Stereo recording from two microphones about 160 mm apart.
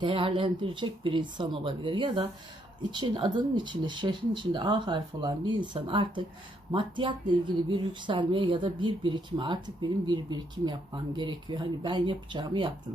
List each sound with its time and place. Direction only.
0.0 s speech: 35° right (ahead or behind)